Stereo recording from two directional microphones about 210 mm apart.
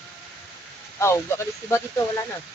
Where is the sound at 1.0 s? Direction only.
15° left (ahead or behind).